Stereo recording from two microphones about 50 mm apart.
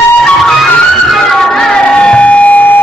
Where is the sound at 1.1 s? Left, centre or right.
Centre; by 2.7 s left.